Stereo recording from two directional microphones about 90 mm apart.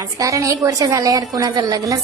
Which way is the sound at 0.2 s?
40° right (ahead or behind).